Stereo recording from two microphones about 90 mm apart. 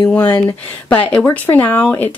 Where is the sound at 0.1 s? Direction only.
20° left (ahead or behind).